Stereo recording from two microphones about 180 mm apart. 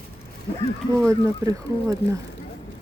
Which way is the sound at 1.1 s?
20° right (ahead or behind).